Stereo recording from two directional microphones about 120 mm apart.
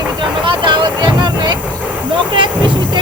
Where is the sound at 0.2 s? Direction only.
40° right (ahead or behind).